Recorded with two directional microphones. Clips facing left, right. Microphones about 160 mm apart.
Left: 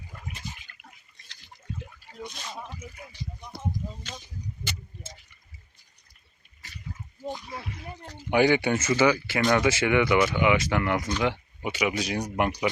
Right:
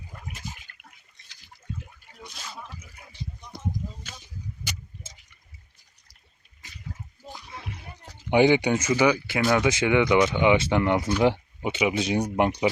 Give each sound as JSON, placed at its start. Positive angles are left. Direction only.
{"t": 0.8, "sound": "a sound", "side_deg": -60}
{"t": 8.3, "sound": "speech", "side_deg": -20}
{"t": 9.6, "sound": "speech", "side_deg": -15}